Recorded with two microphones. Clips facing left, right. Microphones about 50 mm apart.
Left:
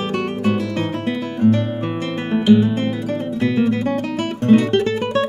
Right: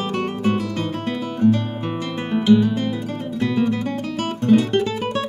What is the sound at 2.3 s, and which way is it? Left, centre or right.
Guitar, left.